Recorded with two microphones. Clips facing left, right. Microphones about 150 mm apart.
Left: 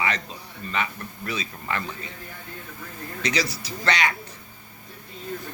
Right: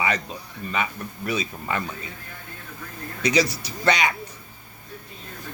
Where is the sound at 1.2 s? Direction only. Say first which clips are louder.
Right 4 dB; 15° right (ahead or behind).